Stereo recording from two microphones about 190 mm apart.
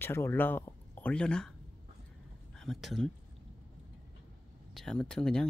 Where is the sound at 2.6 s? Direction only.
Centre (ahead or behind).